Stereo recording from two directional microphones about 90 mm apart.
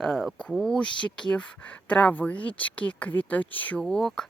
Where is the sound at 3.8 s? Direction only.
5° left (ahead or behind).